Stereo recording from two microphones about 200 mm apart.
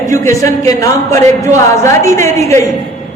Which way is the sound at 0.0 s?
15° left (ahead or behind).